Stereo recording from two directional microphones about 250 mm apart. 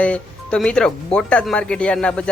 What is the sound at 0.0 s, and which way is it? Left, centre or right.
Speech, centre.